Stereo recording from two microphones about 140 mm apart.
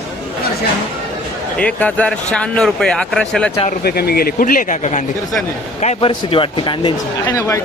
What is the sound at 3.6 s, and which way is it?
Speech, 90° left.